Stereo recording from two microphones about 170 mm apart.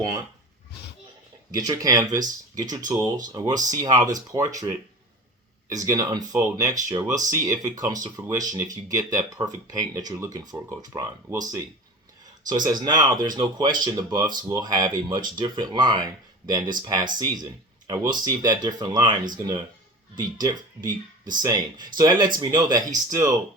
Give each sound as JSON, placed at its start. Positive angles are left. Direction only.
{"t": 1.5, "sound": "speech", "side_deg": -20}
{"t": 5.6, "sound": "speech", "side_deg": -20}
{"t": 20.1, "sound": "speech", "side_deg": -25}